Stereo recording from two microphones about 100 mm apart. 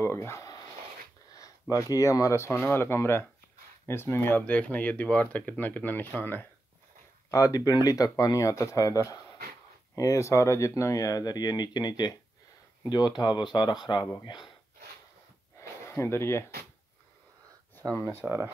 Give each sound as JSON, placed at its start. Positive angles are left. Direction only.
{"t": 0.0, "sound": "speech", "side_deg": 25}
{"t": 7.2, "sound": "speech", "side_deg": 35}
{"t": 15.8, "sound": "speech", "side_deg": 25}
{"t": 17.9, "sound": "speech", "side_deg": 25}
{"t": 18.2, "sound": "speech", "side_deg": -25}